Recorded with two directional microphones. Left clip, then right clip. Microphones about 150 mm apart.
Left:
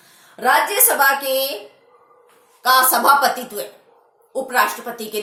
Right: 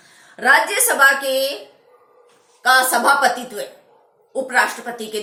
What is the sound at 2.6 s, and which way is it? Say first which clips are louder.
A woman's voice: even; 15° left (ahead or behind).